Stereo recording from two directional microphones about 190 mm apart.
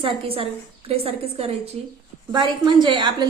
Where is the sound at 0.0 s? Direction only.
30° right (ahead or behind).